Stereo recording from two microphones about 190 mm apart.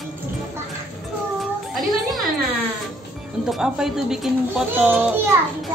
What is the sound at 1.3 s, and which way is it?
Cat, centre (ahead or behind).